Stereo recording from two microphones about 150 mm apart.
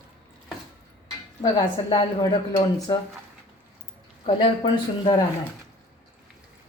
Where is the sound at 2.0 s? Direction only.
35° left (ahead or behind).